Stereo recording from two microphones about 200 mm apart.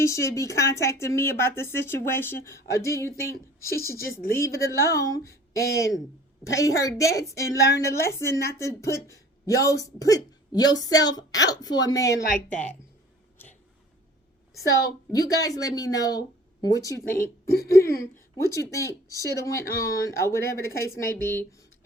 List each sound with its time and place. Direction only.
0.0 s speech: 15° left (ahead or behind)
12.2 s speech: 40° left (ahead or behind)
14.5 s speech: 15° left (ahead or behind)
17.2 s a woman's voice: 50° left (ahead or behind)
18.4 s speech: 15° left (ahead or behind)